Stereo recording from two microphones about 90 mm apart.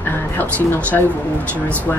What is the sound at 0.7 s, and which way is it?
Speech, 20° left (ahead or behind).